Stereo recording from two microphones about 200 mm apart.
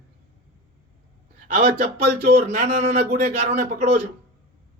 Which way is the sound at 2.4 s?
35° right (ahead or behind).